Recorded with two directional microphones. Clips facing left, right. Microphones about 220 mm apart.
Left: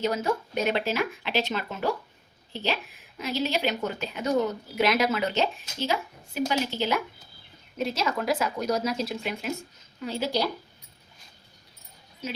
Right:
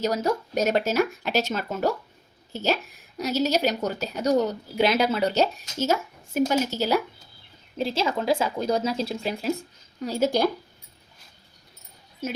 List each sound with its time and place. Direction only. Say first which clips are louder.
0.0 s a woman's voice: right 2 dB; 40° right (ahead or behind)